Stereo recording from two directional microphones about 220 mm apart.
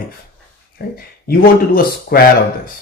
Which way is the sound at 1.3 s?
45° left (ahead or behind).